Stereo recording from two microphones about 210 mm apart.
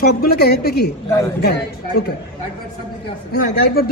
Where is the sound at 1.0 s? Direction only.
15° left (ahead or behind).